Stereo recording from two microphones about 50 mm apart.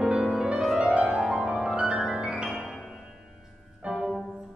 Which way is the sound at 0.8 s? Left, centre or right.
Right.